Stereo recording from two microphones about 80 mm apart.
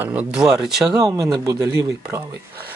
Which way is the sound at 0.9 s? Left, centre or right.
Right.